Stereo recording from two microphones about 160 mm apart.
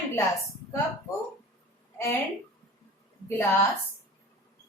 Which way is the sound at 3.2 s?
15° left (ahead or behind).